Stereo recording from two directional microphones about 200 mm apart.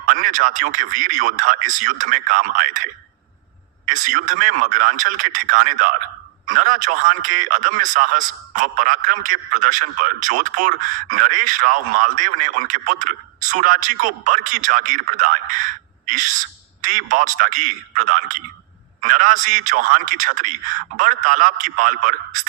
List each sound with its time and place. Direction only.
0.1 s a man's voice: 40° right (ahead or behind)
3.8 s a man's voice: 40° right (ahead or behind)
16.0 s owl: 40° right (ahead or behind)
16.8 s a man's voice: 40° right (ahead or behind)